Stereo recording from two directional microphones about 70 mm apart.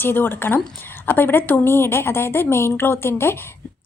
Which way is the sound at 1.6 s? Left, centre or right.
Left.